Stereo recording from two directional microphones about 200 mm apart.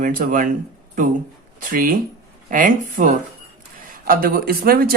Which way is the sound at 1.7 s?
45° right (ahead or behind).